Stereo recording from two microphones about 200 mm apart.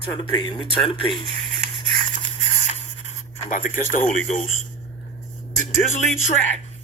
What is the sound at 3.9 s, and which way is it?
Speech, 40° left (ahead or behind).